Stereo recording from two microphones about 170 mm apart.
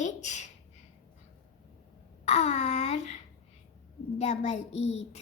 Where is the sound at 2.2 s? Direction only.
40° left (ahead or behind).